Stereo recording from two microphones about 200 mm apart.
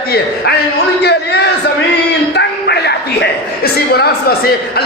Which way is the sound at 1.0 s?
55° left (ahead or behind).